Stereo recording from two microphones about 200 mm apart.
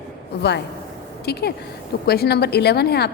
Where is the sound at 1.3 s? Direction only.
55° left (ahead or behind).